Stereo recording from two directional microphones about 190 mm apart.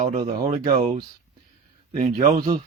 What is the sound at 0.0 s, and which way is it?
Speech, 35° right (ahead or behind).